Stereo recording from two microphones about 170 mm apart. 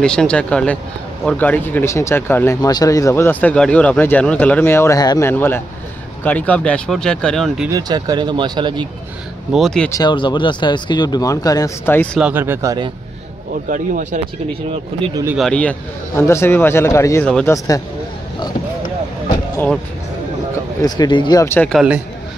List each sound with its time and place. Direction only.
0.0 s speech: 5° left (ahead or behind)
7.7 s speech: 25° right (ahead or behind)
9.5 s speech: centre (ahead or behind)
9.8 s speech: 25° left (ahead or behind)
12.2 s speech: 10° right (ahead or behind)
13.7 s speech: 50° right (ahead or behind)
15.3 s speech: 5° left (ahead or behind)
16.2 s speech: 15° left (ahead or behind)
20.8 s speech: 25° left (ahead or behind)
21.7 s speech: 5° right (ahead or behind)